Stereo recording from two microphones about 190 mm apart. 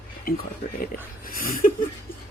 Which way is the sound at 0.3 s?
50° left (ahead or behind).